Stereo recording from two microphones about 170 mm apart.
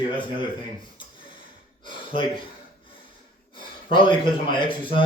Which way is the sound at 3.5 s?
30° left (ahead or behind).